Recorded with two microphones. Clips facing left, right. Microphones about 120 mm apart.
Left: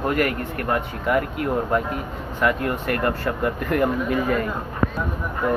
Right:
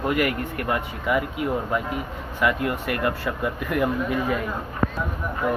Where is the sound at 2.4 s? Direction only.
45° left (ahead or behind).